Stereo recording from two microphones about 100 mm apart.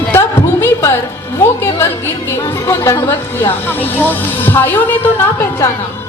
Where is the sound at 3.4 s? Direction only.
20° left (ahead or behind).